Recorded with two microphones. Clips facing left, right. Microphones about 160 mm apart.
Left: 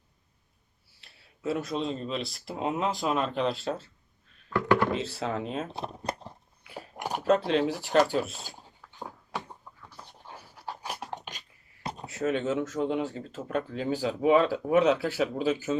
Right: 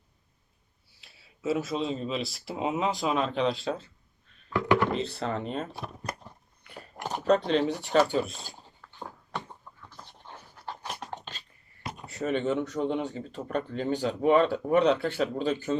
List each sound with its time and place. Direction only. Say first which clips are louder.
1.0 s speech: right 2 dB; centre (ahead or behind)
4.9 s speech: even; centre (ahead or behind)
5.7 s speech: left 3 dB; 25° left (ahead or behind)
6.9 s speech: even; 10° left (ahead or behind)
8.0 s a sound: even; 5° left (ahead or behind)
9.9 s dog: left 1 dB; 5° left (ahead or behind)
12.0 s speech: even; centre (ahead or behind)